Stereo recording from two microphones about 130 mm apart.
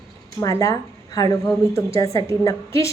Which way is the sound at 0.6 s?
25° left (ahead or behind).